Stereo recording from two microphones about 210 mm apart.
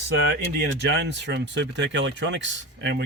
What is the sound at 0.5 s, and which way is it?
Speech, 55° right (ahead or behind).